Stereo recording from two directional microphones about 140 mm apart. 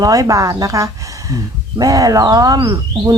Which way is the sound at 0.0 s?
25° right (ahead or behind).